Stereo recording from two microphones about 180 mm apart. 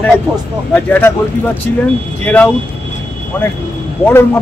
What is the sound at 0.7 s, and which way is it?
Speech, 10° left (ahead or behind).